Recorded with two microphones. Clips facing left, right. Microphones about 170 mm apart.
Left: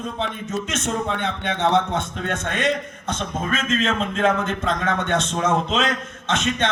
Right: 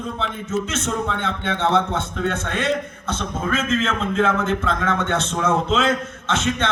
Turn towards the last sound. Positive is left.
turn(degrees=20)  # may be behind; listen again after turning